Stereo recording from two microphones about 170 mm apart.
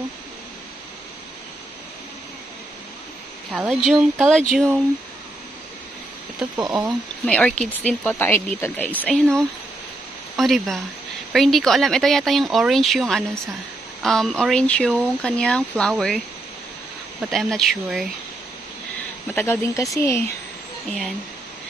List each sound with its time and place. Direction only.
3.5 s speech: 5° right (ahead or behind)
6.5 s speech: 20° right (ahead or behind)
6.9 s speech: 5° left (ahead or behind)
17.2 s speech: centre (ahead or behind)
19.3 s speech: 15° left (ahead or behind)